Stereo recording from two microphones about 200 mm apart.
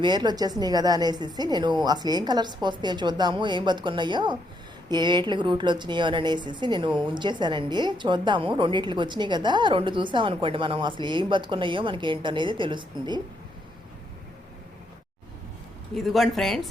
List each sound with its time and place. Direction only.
0.0 s a woman's voice: 20° right (ahead or behind)
16.0 s speech: centre (ahead or behind)